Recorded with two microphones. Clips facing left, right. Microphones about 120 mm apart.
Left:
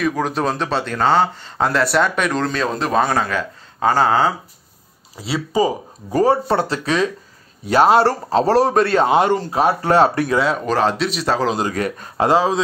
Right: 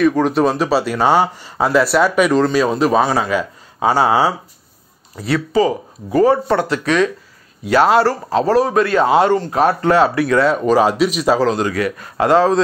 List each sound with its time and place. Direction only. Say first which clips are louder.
0.0 s speech: right 6 dB; centre (ahead or behind)
5.1 s speech: right 4 dB; 10° left (ahead or behind)
6.1 s speech: right 2 dB; 30° left (ahead or behind); by 9.8 s 15° left (ahead or behind)
9.8 s speech: right 1 dB; 35° left (ahead or behind)
10.3 s speech: right 5 dB; centre (ahead or behind)
11.6 s speech: right 3 dB; 35° left (ahead or behind)
12.3 s speech: right 4 dB; 10° left (ahead or behind)